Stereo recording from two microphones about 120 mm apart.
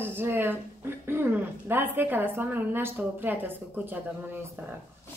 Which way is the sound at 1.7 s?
15° right (ahead or behind).